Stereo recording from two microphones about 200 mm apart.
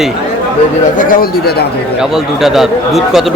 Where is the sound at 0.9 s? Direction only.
45° left (ahead or behind).